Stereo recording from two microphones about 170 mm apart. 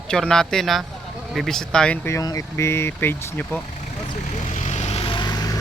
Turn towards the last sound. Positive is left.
turn(degrees=25)  # may be behind; listen again after turning